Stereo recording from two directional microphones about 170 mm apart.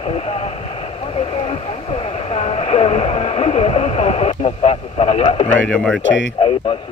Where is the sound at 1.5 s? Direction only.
35° left (ahead or behind).